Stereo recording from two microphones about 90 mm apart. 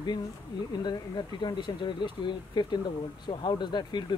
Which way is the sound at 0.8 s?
55° left (ahead or behind).